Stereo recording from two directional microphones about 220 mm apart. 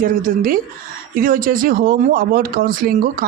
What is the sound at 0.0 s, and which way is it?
Speech, 40° right (ahead or behind).